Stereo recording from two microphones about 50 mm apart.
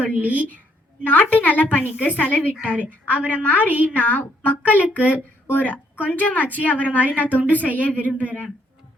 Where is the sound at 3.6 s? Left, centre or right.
Right.